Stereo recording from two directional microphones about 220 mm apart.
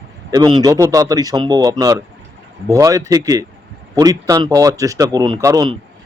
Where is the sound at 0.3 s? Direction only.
20° right (ahead or behind).